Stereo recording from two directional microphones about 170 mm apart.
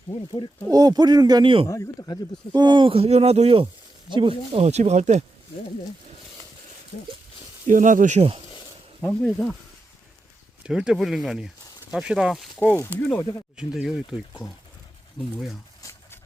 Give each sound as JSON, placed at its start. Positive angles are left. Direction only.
{"t": 0.7, "sound": "speech", "side_deg": -20}
{"t": 1.6, "sound": "speech", "side_deg": 20}
{"t": 2.5, "sound": "speech", "side_deg": -25}
{"t": 7.7, "sound": "speech", "side_deg": -50}
{"t": 9.0, "sound": "speech", "side_deg": 0}
{"t": 10.6, "sound": "speech", "side_deg": -5}
{"t": 15.8, "sound": "a sound", "side_deg": 15}